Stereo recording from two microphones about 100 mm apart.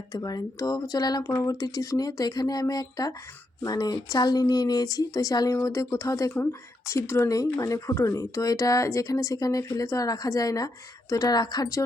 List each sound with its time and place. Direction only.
0.1 s speech: 40° left (ahead or behind)